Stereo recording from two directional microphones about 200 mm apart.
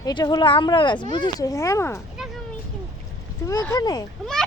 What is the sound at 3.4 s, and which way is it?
Speech, 15° left (ahead or behind).